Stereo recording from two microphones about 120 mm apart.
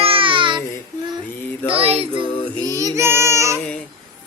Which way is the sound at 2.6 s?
25° right (ahead or behind).